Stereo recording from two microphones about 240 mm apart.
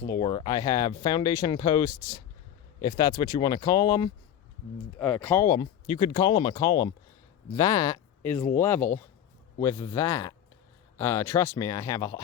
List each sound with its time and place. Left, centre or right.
0.1 s speech: centre